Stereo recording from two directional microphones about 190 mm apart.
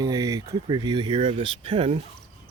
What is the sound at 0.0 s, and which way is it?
Speech, 20° right (ahead or behind).